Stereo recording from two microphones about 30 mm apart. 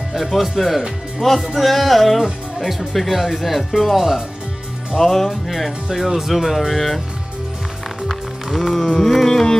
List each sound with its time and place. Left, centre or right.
0.1 s speech: centre
1.2 s speech: centre
1.6 s speech: centre
4.9 s a sound: centre
5.9 s speech: centre
8.5 s a sound: centre